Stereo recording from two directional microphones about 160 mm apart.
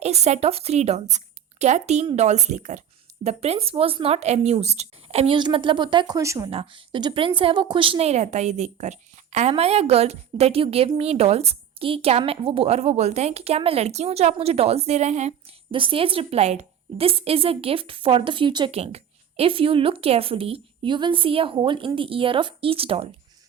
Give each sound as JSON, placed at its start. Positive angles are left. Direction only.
{"t": 0.0, "sound": "a woman's voice", "side_deg": -40}
{"t": 6.5, "sound": "a woman's voice", "side_deg": -35}